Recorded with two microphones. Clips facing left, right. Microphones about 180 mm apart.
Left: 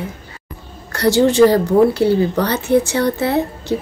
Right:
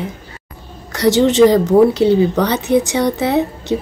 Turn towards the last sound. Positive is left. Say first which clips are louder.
# right 2 dB
turn(degrees=-15)  # may be behind; listen again after turning